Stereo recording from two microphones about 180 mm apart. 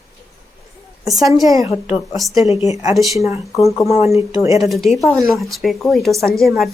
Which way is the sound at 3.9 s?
35° left (ahead or behind).